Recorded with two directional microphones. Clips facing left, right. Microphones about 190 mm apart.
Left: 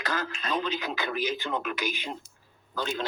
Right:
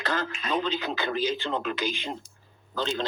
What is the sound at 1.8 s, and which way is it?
Speech, 10° left (ahead or behind).